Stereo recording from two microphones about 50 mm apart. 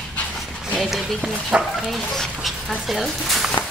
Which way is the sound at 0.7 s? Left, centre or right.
Centre.